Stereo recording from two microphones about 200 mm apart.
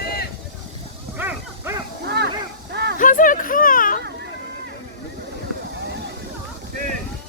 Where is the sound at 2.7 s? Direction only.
55° right (ahead or behind).